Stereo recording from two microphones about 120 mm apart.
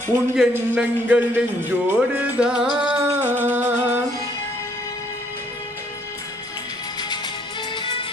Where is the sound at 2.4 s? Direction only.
5° right (ahead or behind).